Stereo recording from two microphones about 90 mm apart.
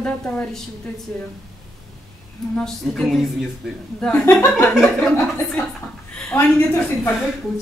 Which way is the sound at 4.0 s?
15° left (ahead or behind).